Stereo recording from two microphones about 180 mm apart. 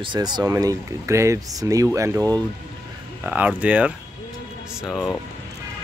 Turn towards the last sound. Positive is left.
turn(degrees=0)  # may be behind; listen again after turning